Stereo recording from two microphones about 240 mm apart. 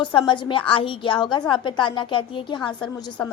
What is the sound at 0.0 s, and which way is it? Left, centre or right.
A woman's voice, left.